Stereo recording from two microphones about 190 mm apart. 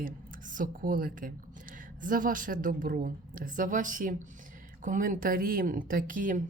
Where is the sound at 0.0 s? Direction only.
45° right (ahead or behind).